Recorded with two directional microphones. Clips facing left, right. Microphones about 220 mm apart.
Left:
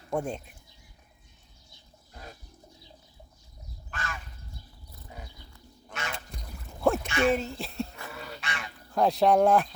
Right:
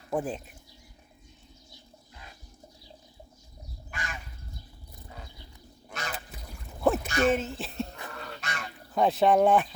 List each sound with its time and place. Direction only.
0.1 s speech: 5° right (ahead or behind)
3.9 s crow: 15° right (ahead or behind)
5.9 s duck: 35° right (ahead or behind)
6.1 s a sound: 5° right (ahead or behind)
7.3 s speech: centre (ahead or behind)
8.1 s goose: 5° left (ahead or behind)
8.4 s goose: 40° right (ahead or behind)
8.9 s speech: centre (ahead or behind)